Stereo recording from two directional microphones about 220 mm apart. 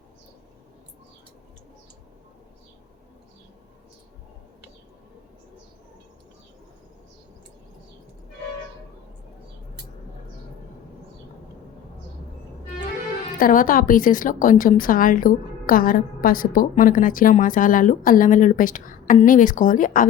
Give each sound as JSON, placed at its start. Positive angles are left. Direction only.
{"t": 13.4, "sound": "a woman's voice", "side_deg": 40}